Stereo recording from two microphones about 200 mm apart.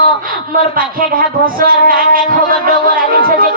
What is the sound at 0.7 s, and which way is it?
Speech, 45° right (ahead or behind).